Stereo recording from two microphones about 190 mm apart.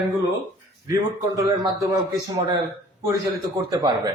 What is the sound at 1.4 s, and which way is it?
Speech, 20° right (ahead or behind).